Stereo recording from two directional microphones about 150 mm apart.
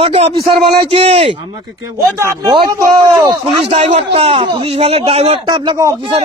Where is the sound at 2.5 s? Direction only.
30° right (ahead or behind).